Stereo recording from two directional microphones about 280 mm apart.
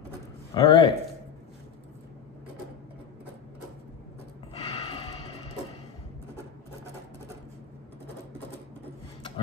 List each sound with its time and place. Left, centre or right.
0.6 s speech: centre
4.6 s gasp: centre